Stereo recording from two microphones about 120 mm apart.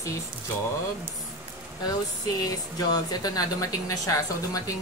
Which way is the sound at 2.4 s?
35° left (ahead or behind).